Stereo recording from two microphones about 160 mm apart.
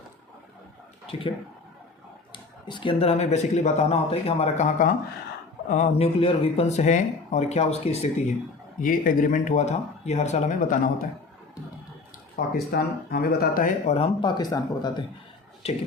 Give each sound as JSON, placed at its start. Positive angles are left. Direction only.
{"t": 2.3, "sound": "speech", "side_deg": 30}
{"t": 8.8, "sound": "speech", "side_deg": 60}
{"t": 12.4, "sound": "speech", "side_deg": 65}